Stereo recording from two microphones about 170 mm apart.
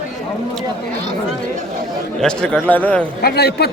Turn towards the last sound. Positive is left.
turn(degrees=70)  # may be behind; listen again after turning